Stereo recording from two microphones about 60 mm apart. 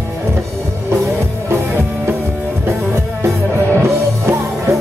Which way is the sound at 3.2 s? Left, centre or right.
Right.